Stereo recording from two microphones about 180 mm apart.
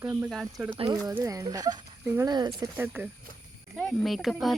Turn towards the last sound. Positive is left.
turn(degrees=0)  # may be behind; listen again after turning